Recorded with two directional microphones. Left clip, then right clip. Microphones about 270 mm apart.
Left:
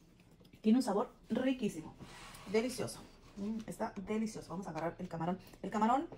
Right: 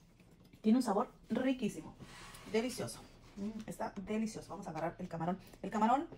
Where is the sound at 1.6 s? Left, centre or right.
Centre.